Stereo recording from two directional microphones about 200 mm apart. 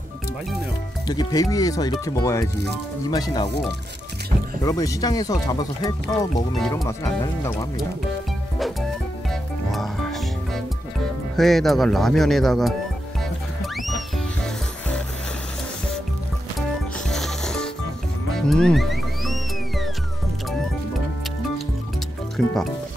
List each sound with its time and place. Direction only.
1.0 s speech: 20° left (ahead or behind)
4.6 s speech: 15° left (ahead or behind)
9.3 s music: centre (ahead or behind)
11.3 s speech: centre (ahead or behind)
17.1 s music: centre (ahead or behind)
22.4 s speech: 5° left (ahead or behind)